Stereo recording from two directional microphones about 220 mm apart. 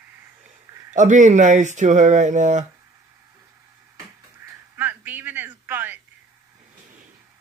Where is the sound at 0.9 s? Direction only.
35° right (ahead or behind).